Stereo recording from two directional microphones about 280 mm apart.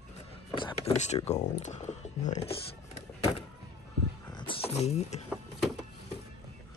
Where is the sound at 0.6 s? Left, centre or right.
Centre.